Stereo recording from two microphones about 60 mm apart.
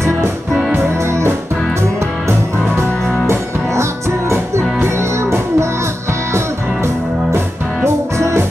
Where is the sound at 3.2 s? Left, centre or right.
Right.